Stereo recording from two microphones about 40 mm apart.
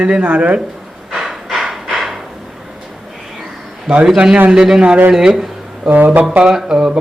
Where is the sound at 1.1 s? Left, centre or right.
Centre.